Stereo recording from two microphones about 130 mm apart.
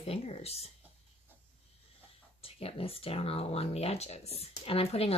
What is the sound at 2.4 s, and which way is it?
Speech, 45° left (ahead or behind).